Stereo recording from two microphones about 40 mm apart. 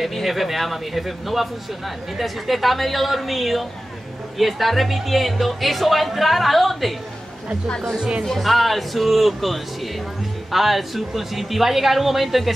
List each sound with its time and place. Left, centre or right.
0.0 s speech: centre
7.6 s a woman's voice: left
8.2 s speech: centre